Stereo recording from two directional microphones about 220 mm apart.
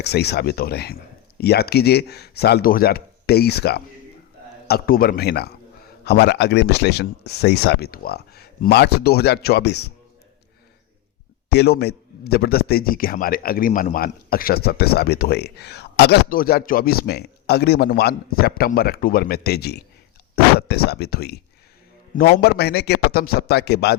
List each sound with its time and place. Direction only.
0.0 s a man's voice: 50° left (ahead or behind)
11.4 s a man's voice: 50° left (ahead or behind)